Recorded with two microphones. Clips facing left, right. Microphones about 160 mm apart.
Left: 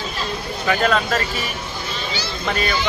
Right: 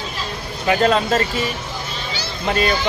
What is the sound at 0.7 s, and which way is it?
Speech, 30° right (ahead or behind).